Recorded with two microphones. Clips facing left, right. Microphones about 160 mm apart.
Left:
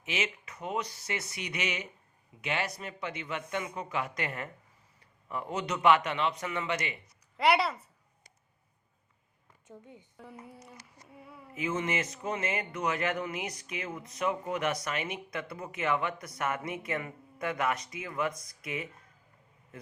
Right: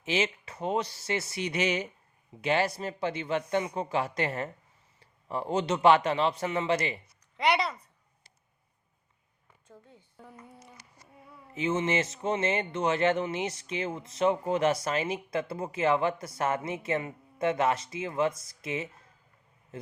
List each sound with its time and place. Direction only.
0.0 s a man's voice: 30° right (ahead or behind)
7.3 s speech: 5° left (ahead or behind)
9.6 s speech: 15° left (ahead or behind)
11.5 s speech: 25° right (ahead or behind)